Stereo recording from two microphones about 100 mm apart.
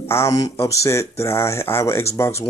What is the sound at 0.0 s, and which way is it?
Speech, 25° left (ahead or behind).